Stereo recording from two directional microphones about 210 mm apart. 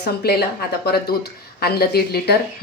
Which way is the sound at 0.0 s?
50° left (ahead or behind).